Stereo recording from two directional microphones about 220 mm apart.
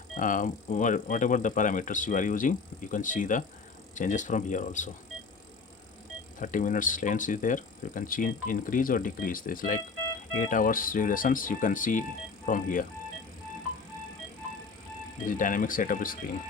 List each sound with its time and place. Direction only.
0.2 s speech: 35° left (ahead or behind)
6.4 s speech: 35° left (ahead or behind)
15.3 s speech: 35° left (ahead or behind)